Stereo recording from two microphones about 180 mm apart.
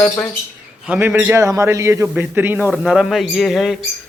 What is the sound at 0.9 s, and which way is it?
A man's voice, 10° right (ahead or behind).